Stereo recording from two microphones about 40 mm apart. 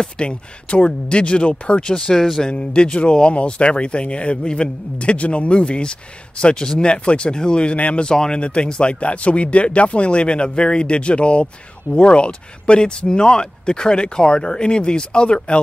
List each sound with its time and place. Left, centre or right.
0.0 s speech: left
7.7 s speech: left
8.0 s speech: left